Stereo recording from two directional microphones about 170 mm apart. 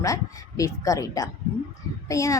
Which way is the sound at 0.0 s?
20° left (ahead or behind).